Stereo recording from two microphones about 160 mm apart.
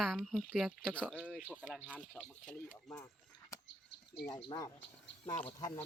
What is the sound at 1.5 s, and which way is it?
Speech, 5° left (ahead or behind).